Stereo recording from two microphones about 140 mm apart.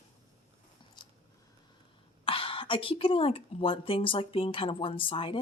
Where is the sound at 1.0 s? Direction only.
30° left (ahead or behind).